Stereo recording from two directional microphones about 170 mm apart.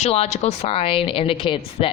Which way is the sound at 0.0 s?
40° left (ahead or behind).